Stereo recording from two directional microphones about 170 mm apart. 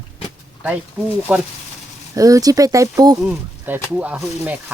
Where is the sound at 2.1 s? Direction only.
20° right (ahead or behind).